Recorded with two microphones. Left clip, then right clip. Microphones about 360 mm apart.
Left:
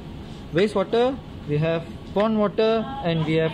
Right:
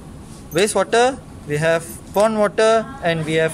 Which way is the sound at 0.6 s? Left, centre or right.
Right.